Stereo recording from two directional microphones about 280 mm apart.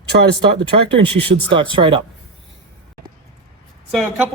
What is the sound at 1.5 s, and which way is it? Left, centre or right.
Speech, centre.